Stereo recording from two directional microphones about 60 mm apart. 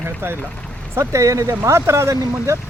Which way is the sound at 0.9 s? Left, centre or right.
Right.